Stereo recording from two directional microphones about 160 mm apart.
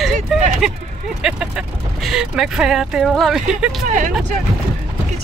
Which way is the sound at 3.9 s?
50° right (ahead or behind).